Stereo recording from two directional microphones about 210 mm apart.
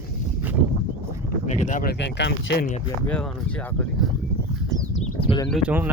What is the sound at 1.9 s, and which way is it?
Speech, 55° left (ahead or behind).